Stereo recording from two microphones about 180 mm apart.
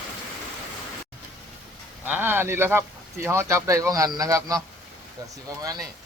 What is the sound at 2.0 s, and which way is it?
Speech, 10° right (ahead or behind).